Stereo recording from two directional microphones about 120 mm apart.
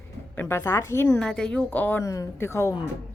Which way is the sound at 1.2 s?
5° left (ahead or behind).